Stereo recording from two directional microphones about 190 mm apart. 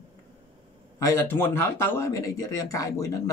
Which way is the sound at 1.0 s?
15° left (ahead or behind).